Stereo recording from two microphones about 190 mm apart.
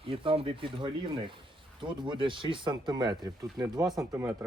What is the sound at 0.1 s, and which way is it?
Speech, 30° right (ahead or behind).